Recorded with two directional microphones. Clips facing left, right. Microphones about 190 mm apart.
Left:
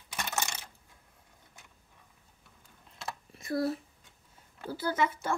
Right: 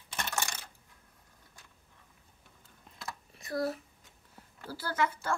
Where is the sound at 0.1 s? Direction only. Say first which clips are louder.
Left 1 dB; 15° left (ahead or behind).